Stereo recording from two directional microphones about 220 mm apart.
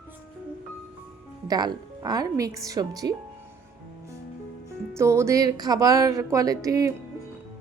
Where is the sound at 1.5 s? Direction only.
20° right (ahead or behind).